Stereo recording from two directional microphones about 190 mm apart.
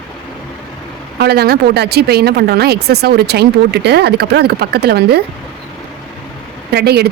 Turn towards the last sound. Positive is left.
turn(degrees=-55)  # may be behind; listen again after turning